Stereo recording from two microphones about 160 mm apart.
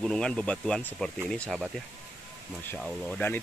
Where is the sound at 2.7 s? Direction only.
5° left (ahead or behind).